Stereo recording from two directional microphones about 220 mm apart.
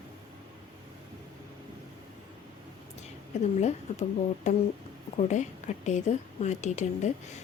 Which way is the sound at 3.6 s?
30° left (ahead or behind).